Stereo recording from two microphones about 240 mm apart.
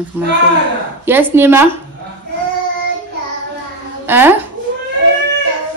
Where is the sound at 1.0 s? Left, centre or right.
Centre.